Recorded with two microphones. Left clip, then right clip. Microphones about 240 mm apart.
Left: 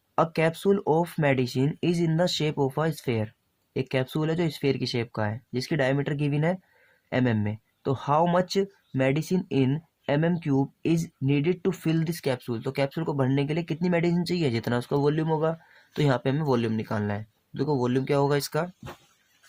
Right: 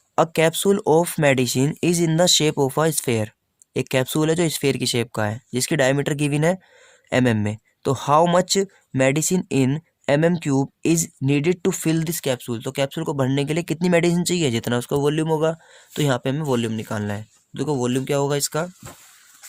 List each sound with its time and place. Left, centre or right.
0.2 s speech: right